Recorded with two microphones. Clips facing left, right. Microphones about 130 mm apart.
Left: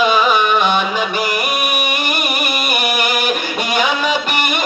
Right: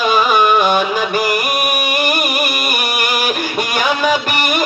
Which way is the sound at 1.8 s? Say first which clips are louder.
Right 3 dB; 40° right (ahead or behind).